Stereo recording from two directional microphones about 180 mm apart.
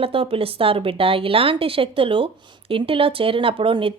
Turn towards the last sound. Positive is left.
turn(degrees=-30)  # may be behind; listen again after turning